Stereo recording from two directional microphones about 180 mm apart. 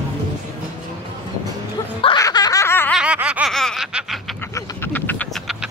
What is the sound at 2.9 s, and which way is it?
Laughter, 5° right (ahead or behind).